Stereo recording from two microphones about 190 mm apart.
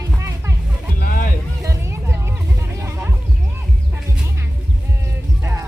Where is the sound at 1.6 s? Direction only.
15° right (ahead or behind).